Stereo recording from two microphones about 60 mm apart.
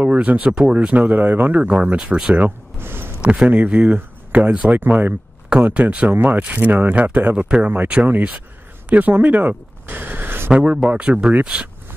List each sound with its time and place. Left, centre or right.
0.0 s speech: right
2.8 s a sound: right
3.4 s speech: right
4.7 s speech: right
10.5 s speech: centre